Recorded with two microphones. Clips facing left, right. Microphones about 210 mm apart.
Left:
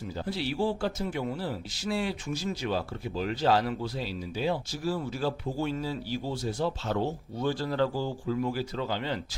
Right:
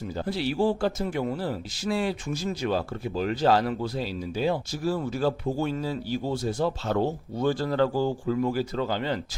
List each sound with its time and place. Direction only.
0.3 s speech: 45° right (ahead or behind)